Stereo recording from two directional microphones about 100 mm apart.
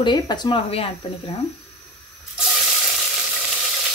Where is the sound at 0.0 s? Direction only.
45° left (ahead or behind).